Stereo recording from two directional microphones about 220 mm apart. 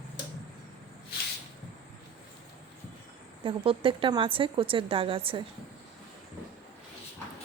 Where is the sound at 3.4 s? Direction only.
25° right (ahead or behind).